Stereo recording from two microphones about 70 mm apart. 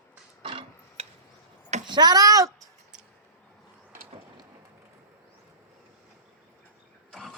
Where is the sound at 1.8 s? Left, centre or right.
Right.